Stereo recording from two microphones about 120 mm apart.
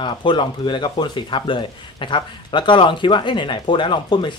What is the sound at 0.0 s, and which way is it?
Speech, 40° left (ahead or behind).